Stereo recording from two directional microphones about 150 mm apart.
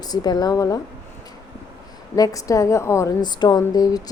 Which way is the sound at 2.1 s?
25° left (ahead or behind).